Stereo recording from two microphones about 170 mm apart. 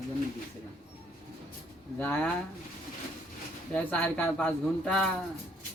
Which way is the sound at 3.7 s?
5° left (ahead or behind).